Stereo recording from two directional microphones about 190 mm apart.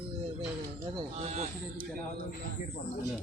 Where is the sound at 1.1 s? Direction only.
35° right (ahead or behind).